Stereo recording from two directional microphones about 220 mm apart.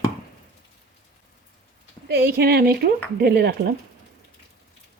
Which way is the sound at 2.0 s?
45° right (ahead or behind).